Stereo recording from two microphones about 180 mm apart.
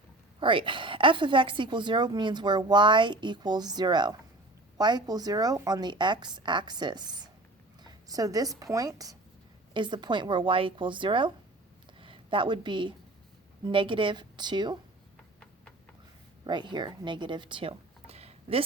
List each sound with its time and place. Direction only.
0.3 s a woman's voice: 30° right (ahead or behind)
11.9 s a sound: 30° right (ahead or behind)
13.7 s a woman's voice: 30° right (ahead or behind)
16.4 s speech: 25° right (ahead or behind)